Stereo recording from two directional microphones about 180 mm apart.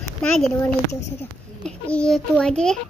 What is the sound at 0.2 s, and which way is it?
Speech, 5° left (ahead or behind).